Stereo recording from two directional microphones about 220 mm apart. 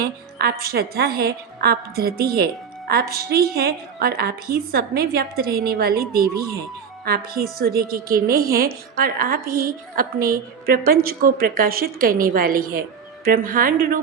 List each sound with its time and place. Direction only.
0.0 s a woman's voice: 45° right (ahead or behind)